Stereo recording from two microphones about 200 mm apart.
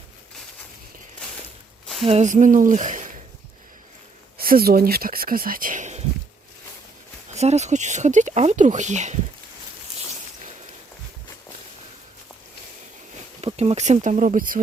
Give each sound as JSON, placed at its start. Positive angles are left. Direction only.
{"t": 2.0, "sound": "speech", "side_deg": -35}
{"t": 4.4, "sound": "speech", "side_deg": -50}
{"t": 7.3, "sound": "speech", "side_deg": -35}
{"t": 13.4, "sound": "speech", "side_deg": -30}